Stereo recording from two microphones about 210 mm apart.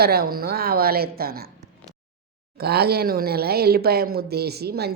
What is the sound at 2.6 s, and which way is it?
Speech, 50° right (ahead or behind).